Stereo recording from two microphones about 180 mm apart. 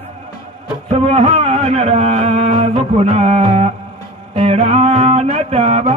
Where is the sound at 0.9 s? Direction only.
30° right (ahead or behind).